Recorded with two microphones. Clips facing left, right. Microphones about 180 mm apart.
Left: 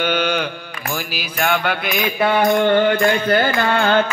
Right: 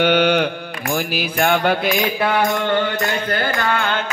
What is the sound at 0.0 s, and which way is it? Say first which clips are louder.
Mantra: right 4 dB; 65° right (ahead or behind).